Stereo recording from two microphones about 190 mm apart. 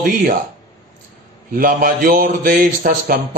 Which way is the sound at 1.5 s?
50° right (ahead or behind).